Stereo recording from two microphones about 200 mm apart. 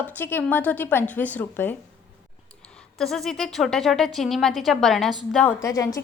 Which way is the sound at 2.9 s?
Centre (ahead or behind).